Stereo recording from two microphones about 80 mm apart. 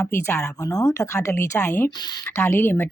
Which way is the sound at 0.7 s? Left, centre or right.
Left.